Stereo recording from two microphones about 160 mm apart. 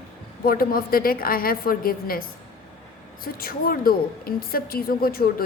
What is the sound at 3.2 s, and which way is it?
A woman's voice, 65° left (ahead or behind).